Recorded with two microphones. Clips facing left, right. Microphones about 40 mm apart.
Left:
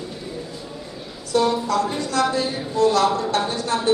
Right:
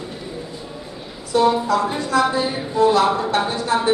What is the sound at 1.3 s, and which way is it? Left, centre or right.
A woman's voice, centre.